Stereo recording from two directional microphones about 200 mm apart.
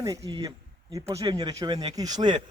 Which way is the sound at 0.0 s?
15° right (ahead or behind).